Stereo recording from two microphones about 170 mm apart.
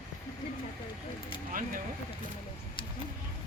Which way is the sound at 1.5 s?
55° right (ahead or behind).